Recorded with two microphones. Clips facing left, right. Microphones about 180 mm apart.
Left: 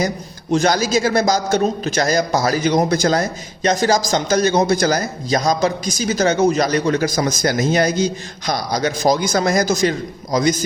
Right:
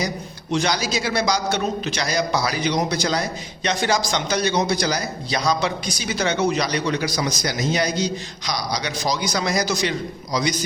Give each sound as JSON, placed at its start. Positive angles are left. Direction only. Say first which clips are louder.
{"t": 0.5, "sound": "a man's voice", "louder": "left 6 dB", "side_deg": 45}